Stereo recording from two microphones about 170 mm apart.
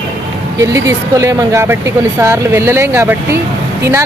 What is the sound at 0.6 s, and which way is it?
Speech, 20° right (ahead or behind).